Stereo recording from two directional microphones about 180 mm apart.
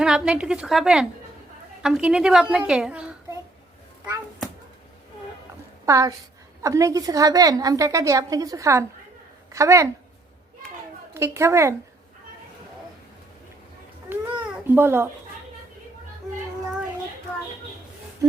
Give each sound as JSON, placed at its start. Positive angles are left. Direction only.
{"t": 0.0, "sound": "a woman's voice", "side_deg": -5}
{"t": 5.8, "sound": "a woman's voice", "side_deg": -15}
{"t": 11.1, "sound": "a woman's voice", "side_deg": -15}
{"t": 14.1, "sound": "babbling", "side_deg": -10}